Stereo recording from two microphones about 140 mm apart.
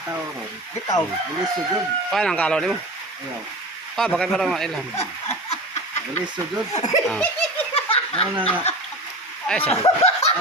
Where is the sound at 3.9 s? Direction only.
5° left (ahead or behind).